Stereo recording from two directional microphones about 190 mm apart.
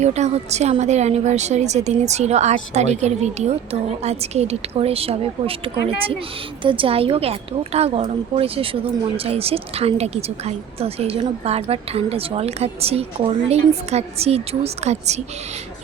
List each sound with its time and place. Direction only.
0.0 s a woman's voice: 35° right (ahead or behind)